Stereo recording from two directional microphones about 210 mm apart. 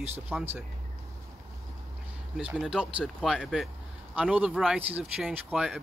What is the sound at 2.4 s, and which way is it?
Speech, 5° right (ahead or behind).